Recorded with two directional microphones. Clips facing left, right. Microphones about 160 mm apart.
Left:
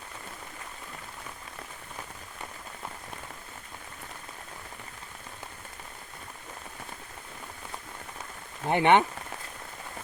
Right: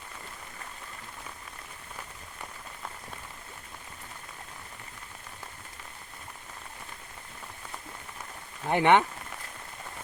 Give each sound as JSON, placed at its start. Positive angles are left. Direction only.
{"t": 8.6, "sound": "speech", "side_deg": 20}